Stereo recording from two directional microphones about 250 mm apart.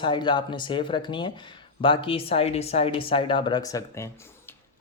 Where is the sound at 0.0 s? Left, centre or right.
Centre.